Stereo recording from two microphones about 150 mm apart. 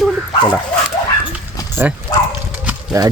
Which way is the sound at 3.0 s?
25° right (ahead or behind).